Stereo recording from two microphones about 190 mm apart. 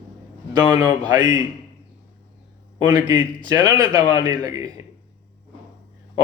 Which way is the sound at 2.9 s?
20° right (ahead or behind).